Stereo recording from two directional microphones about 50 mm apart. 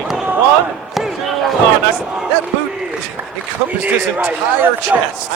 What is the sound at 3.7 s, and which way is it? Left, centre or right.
A man's voice, right.